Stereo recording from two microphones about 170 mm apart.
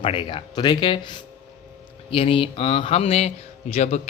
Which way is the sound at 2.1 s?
35° left (ahead or behind).